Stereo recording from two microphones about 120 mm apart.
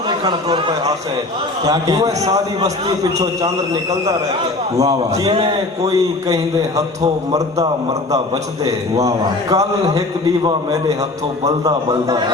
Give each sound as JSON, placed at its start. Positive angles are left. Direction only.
{"t": 1.6, "sound": "a man's voice", "side_deg": -30}
{"t": 4.8, "sound": "a man's voice", "side_deg": -30}
{"t": 5.3, "sound": "a man's voice", "side_deg": -45}
{"t": 5.8, "sound": "a man's voice", "side_deg": -30}
{"t": 8.6, "sound": "a man's voice", "side_deg": -30}